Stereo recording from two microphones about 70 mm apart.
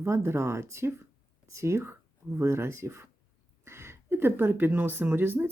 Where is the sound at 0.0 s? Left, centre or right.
Right.